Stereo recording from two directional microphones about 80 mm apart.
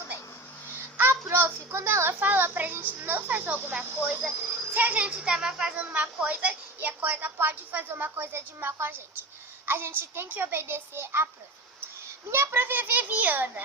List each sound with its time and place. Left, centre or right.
0.9 s a sound: right
2.1 s a woman's voice: right
12.3 s a woman's voice: right